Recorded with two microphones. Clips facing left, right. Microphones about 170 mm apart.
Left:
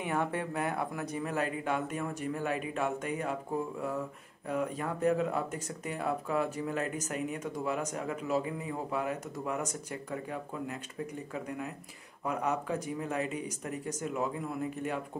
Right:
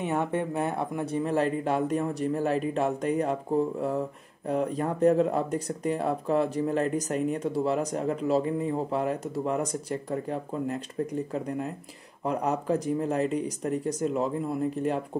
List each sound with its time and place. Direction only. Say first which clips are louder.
0.0 s speech: right 5 dB; 20° right (ahead or behind)
4.5 s speech: right 6 dB; 35° right (ahead or behind)